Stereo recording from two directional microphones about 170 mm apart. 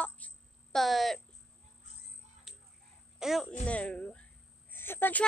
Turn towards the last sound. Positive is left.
turn(degrees=10)  # may be behind; listen again after turning